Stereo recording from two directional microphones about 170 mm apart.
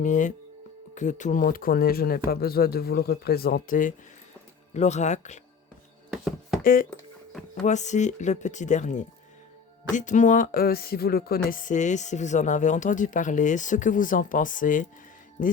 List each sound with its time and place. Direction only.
0.0 s speech: 45° left (ahead or behind)
6.6 s speech: 55° left (ahead or behind)
7.6 s speech: 45° left (ahead or behind)